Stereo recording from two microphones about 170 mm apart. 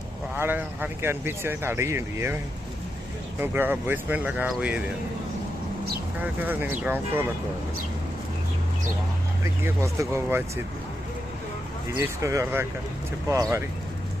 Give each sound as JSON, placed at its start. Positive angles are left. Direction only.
{"t": 0.3, "sound": "speech", "side_deg": -10}
{"t": 3.4, "sound": "speech", "side_deg": -10}
{"t": 6.1, "sound": "speech", "side_deg": -10}
{"t": 9.4, "sound": "speech", "side_deg": -15}
{"t": 11.9, "sound": "speech", "side_deg": -15}